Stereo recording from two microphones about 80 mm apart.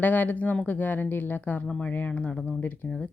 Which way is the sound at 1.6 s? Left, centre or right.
Centre.